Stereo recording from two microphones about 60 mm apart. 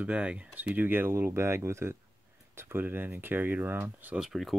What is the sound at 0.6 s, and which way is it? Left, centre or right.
Speech, right.